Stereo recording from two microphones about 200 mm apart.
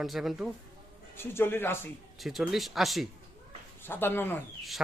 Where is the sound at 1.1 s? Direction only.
10° left (ahead or behind).